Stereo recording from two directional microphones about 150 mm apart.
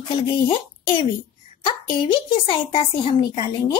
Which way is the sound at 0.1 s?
35° left (ahead or behind).